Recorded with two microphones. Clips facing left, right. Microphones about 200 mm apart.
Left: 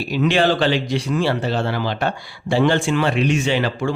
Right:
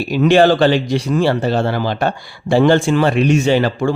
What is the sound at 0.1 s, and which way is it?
Speech, 45° right (ahead or behind).